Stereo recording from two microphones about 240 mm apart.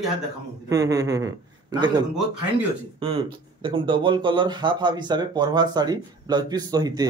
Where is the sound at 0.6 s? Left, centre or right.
Centre.